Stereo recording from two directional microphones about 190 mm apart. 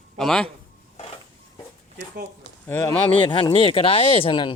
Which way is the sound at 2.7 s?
15° left (ahead or behind).